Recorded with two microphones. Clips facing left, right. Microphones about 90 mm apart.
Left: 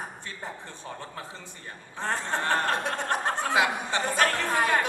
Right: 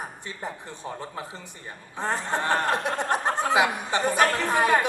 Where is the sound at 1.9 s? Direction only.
15° right (ahead or behind).